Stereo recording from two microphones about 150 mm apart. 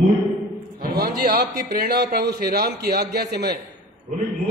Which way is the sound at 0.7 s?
85° right.